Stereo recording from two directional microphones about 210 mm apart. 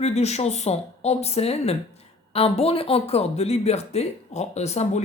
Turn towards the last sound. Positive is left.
turn(degrees=30)  # may be behind; listen again after turning